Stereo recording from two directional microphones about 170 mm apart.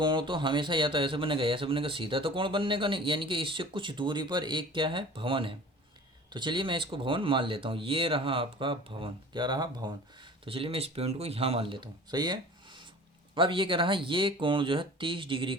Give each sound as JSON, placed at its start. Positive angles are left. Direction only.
{"t": 0.0, "sound": "speech", "side_deg": -25}